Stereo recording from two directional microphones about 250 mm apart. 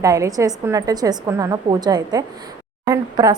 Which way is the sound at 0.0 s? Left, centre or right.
Centre.